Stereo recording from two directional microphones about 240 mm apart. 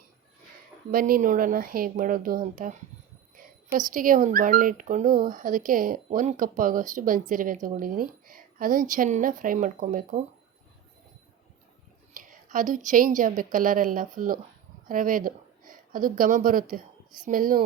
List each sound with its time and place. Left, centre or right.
0.9 s speech: right
3.8 s speech: right
12.1 s speech: right